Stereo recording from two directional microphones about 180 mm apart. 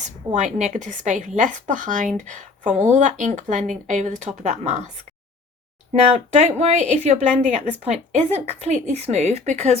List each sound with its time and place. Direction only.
0.3 s speech: 40° right (ahead or behind)
5.9 s a woman's voice: 40° right (ahead or behind)